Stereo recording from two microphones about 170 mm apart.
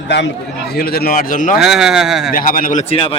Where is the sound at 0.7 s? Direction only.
65° left (ahead or behind).